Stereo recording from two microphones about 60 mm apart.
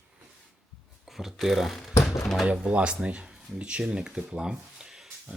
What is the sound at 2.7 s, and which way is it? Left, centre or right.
Speech, centre.